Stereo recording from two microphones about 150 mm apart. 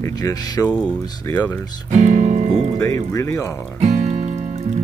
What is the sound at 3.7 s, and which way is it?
Music, 50° right (ahead or behind).